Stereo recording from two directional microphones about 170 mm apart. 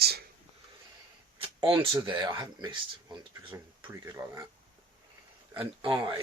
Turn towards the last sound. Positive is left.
turn(degrees=-25)  # may be behind; listen again after turning